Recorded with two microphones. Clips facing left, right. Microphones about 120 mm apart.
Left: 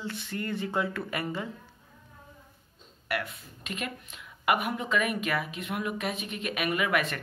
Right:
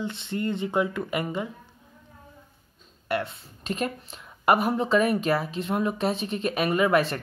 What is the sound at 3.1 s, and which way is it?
A woman's voice, 30° right (ahead or behind).